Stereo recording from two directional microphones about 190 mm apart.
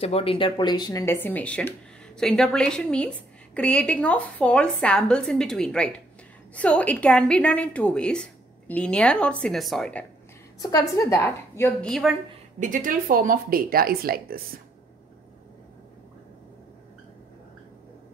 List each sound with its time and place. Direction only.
0.0 s a woman's voice: 30° left (ahead or behind); by 10.0 s 5° left (ahead or behind)
10.6 s a woman's voice: 20° left (ahead or behind)
11.9 s a woman's voice: centre (ahead or behind)
12.5 s speech: 45° right (ahead or behind)